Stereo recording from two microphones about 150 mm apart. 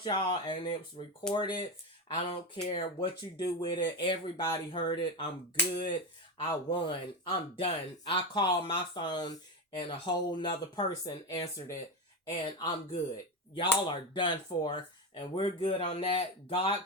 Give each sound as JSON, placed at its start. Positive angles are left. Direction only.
{"t": 0.0, "sound": "speech", "side_deg": 30}